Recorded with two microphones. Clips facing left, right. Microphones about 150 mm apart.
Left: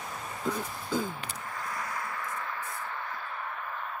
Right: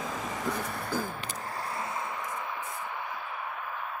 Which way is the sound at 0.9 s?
20° left (ahead or behind).